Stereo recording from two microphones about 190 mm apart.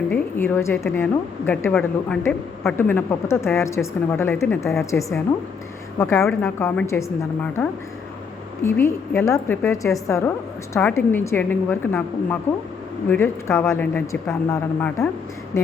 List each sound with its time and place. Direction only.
0.1 s a woman's voice: 10° left (ahead or behind)
4.9 s a woman's voice: 15° left (ahead or behind)
8.6 s a woman's voice: 15° left (ahead or behind)